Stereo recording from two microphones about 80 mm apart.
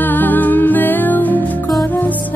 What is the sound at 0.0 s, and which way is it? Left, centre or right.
Music, left.